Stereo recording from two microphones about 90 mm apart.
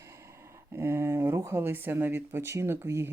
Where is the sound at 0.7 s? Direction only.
30° right (ahead or behind).